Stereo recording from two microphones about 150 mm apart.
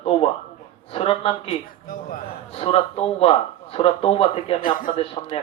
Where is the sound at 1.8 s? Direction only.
70° left (ahead or behind).